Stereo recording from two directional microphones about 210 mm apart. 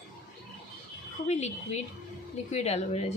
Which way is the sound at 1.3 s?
30° left (ahead or behind).